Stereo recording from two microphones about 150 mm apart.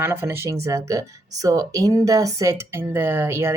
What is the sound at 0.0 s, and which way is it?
Speech, 15° right (ahead or behind).